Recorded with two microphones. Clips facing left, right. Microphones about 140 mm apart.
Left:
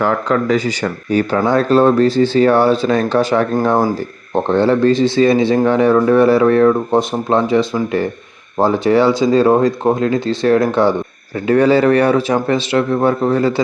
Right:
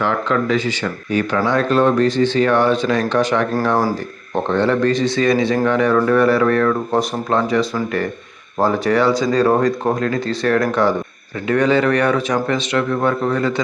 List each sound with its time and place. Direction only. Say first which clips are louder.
0.0 s a man's voice: left 3 dB; 40° left (ahead or behind)
4.4 s a man's voice: left 4 dB; 30° left (ahead or behind)